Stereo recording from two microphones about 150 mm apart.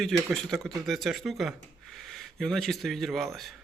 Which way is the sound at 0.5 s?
Centre (ahead or behind).